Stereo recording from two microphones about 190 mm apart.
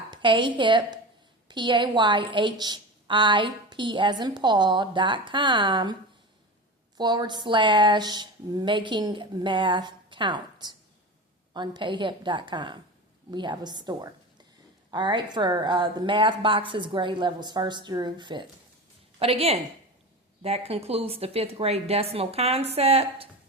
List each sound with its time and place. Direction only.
0.1 s a woman's voice: 25° right (ahead or behind)